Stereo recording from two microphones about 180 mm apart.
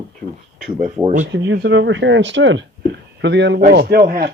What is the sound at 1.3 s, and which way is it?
Speech, 85° right.